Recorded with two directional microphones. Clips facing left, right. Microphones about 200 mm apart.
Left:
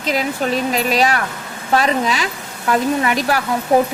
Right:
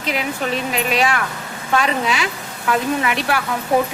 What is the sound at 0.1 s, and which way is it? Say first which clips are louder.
A woman's voice: left 3 dB; 40° left (ahead or behind).